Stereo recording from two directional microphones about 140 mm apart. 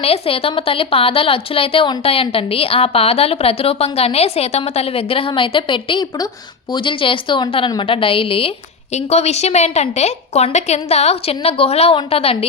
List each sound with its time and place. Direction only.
0.0 s a woman's voice: 45° left (ahead or behind)